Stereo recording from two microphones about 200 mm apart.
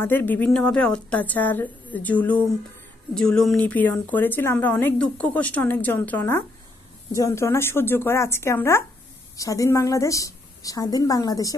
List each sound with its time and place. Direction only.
0.0 s a woman's voice: 10° left (ahead or behind)